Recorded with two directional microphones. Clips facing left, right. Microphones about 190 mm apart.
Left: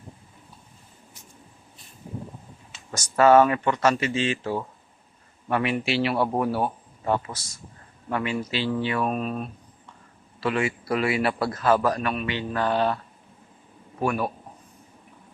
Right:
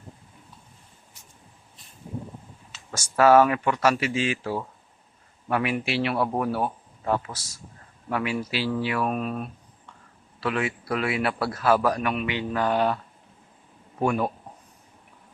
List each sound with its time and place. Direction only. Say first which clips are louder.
2.9 s a man's voice: left 1 dB; 5° right (ahead or behind)
14.0 s speech: right 1 dB; 20° right (ahead or behind)